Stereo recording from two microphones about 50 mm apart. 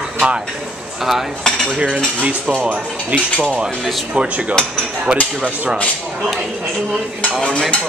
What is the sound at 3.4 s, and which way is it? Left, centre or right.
Speech, centre.